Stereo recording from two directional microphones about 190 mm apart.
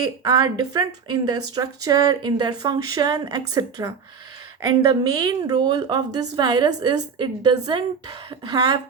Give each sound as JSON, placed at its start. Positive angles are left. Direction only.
{"t": 0.2, "sound": "speech", "side_deg": -20}